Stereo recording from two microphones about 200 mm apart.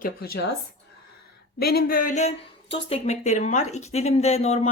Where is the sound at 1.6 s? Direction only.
50° left (ahead or behind).